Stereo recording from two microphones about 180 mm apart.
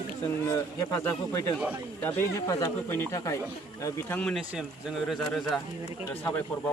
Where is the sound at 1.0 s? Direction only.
15° left (ahead or behind).